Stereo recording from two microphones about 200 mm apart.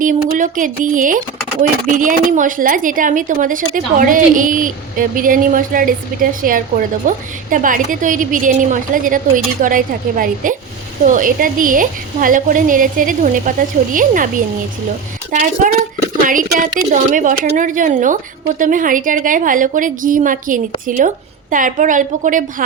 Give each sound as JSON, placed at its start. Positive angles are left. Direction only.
{"t": 0.0, "sound": "speech", "side_deg": -40}